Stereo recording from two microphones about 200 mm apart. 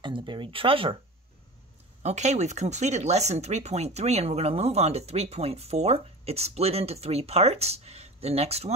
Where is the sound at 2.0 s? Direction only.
35° right (ahead or behind).